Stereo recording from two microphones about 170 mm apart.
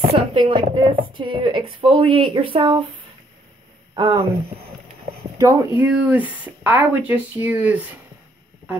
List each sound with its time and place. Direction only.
0.1 s a woman's voice: 30° right (ahead or behind)
3.9 s speech: 30° right (ahead or behind)
5.4 s speech: 20° right (ahead or behind)